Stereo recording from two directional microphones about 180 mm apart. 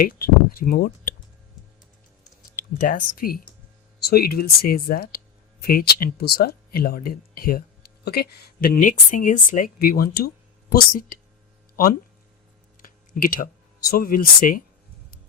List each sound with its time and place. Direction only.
0.0 s speech: 55° left (ahead or behind)
2.8 s speech: 50° left (ahead or behind)
12.8 s speech: 55° left (ahead or behind)